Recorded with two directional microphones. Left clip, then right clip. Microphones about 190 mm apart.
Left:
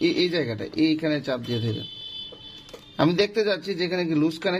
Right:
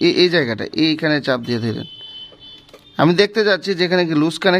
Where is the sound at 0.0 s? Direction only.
40° right (ahead or behind).